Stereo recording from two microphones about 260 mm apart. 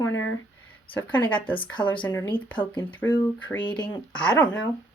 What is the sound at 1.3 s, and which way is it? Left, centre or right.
Speech, centre.